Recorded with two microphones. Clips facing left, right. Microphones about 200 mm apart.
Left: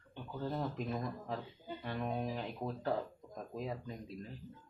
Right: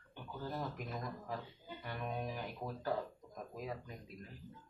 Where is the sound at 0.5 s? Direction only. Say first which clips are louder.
Left 5 dB; 30° left (ahead or behind).